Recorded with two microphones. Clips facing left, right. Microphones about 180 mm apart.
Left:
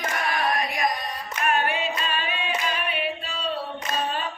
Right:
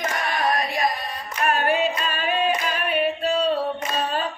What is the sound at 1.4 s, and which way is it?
Singing, 40° right (ahead or behind).